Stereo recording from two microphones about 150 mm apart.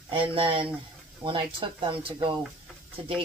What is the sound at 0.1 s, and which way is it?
Speech, 35° right (ahead or behind).